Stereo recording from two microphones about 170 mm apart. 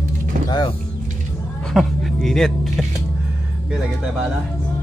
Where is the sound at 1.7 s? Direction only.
Centre (ahead or behind).